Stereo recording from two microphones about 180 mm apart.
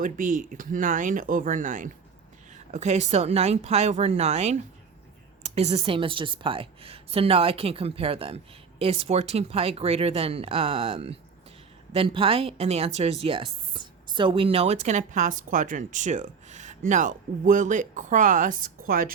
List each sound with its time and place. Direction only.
0.0 s a woman's voice: 45° right (ahead or behind)